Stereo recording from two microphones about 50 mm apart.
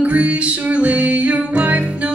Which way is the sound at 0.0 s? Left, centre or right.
Right.